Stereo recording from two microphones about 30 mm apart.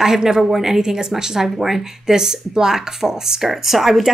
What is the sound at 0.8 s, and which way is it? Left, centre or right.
A woman's voice, right.